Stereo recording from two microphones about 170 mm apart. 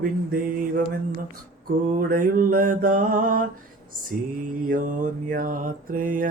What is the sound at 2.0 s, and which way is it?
Mantra, 55° right (ahead or behind).